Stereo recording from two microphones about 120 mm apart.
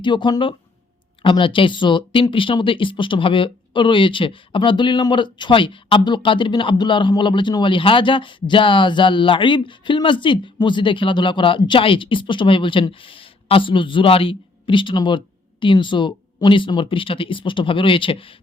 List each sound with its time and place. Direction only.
0.0 s speech: 40° left (ahead or behind)